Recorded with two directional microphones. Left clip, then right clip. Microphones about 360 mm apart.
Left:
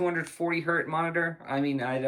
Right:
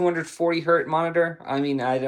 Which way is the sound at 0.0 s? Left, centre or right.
Centre.